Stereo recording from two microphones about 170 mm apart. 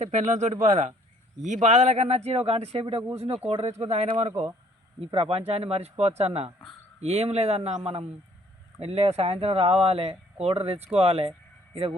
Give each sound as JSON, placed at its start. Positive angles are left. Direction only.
{"t": 0.0, "sound": "speech", "side_deg": -45}
{"t": 8.8, "sound": "speech", "side_deg": -35}